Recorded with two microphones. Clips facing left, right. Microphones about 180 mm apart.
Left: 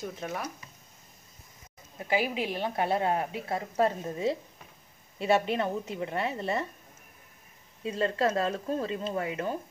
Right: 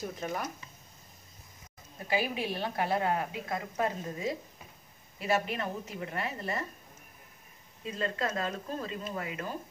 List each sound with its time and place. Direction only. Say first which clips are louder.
0.0 s speech: even; centre (ahead or behind)
2.0 s a woman's voice: left 3 dB; 20° left (ahead or behind)
7.8 s a woman's voice: left 6 dB; 30° left (ahead or behind)